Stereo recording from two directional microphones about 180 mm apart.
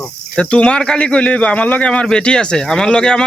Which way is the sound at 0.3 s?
5° left (ahead or behind).